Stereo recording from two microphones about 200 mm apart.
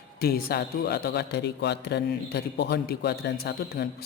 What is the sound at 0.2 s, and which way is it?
Speech, 50° left (ahead or behind).